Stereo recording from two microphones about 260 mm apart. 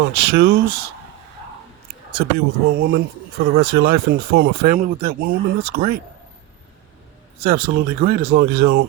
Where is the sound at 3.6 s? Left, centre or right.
Right.